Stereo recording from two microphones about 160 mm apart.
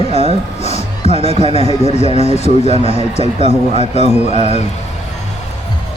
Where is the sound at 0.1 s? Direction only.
40° right (ahead or behind).